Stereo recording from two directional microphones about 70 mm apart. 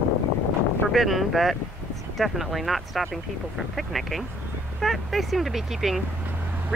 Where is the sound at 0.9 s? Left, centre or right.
Centre.